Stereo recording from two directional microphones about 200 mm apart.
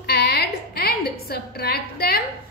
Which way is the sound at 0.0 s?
55° left (ahead or behind).